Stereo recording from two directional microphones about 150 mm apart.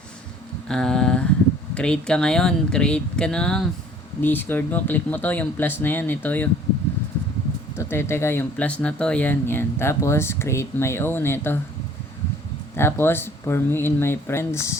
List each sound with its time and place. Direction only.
0.7 s a sound: 5° left (ahead or behind)
1.7 s speech: 5° left (ahead or behind)
7.8 s speech: 15° left (ahead or behind)
12.7 s speech: 15° left (ahead or behind)